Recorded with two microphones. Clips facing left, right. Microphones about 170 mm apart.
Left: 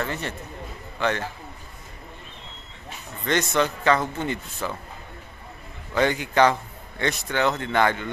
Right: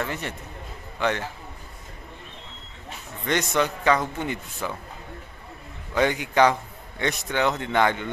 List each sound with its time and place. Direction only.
0.0 s a man's voice: 15° right (ahead or behind)
3.3 s a man's voice: 15° right (ahead or behind)
5.9 s a man's voice: 10° right (ahead or behind)